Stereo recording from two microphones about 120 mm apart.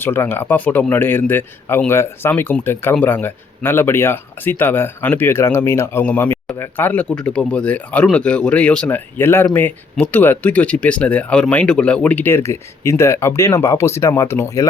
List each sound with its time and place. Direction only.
0.0 s speech: 20° left (ahead or behind)